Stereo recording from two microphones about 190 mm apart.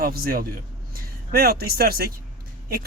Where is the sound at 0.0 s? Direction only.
50° right (ahead or behind).